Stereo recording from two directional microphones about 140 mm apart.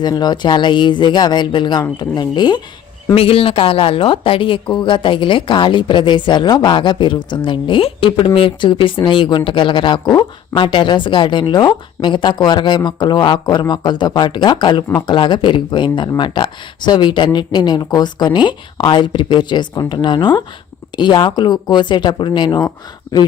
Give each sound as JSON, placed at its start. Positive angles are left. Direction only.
{"t": 0.0, "sound": "speech", "side_deg": 30}
{"t": 3.2, "sound": "speech", "side_deg": 40}